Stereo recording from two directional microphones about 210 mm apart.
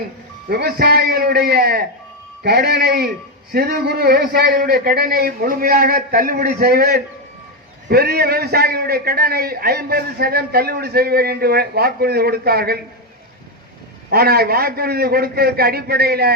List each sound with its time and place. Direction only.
0.4 s a man's voice: 45° right (ahead or behind)
14.1 s a man's voice: 45° right (ahead or behind)